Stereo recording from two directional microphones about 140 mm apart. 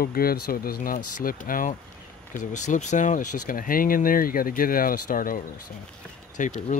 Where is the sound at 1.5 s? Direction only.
80° left.